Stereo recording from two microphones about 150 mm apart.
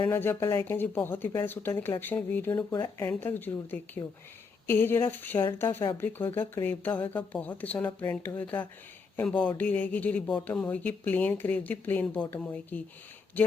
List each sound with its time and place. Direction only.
0.0 s speech: 15° left (ahead or behind)